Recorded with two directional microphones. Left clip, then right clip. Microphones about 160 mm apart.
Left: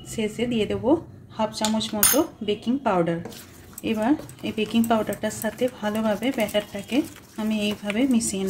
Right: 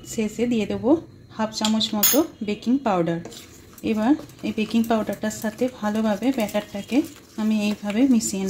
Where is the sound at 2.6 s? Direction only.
30° right (ahead or behind).